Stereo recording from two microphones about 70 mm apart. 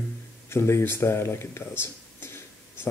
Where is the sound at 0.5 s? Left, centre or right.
Left.